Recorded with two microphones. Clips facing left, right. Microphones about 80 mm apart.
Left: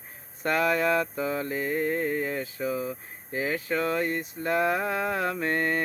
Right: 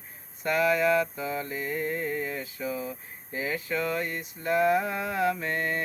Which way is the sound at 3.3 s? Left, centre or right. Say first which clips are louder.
Left 2 dB; left.